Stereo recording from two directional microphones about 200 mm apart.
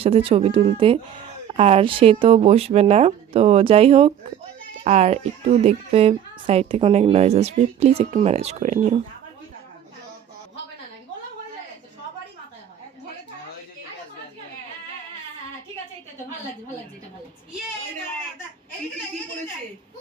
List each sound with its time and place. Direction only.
0.0 s speech: 30° right (ahead or behind)